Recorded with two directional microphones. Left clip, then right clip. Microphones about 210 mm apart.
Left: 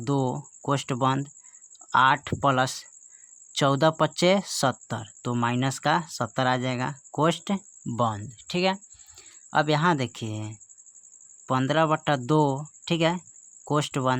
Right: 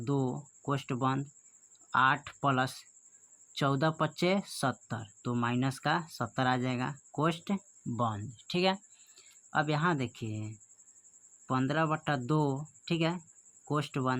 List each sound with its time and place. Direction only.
0.0 s speech: 35° left (ahead or behind)